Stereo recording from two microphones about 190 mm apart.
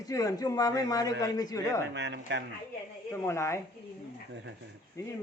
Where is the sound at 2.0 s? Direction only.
65° right (ahead or behind).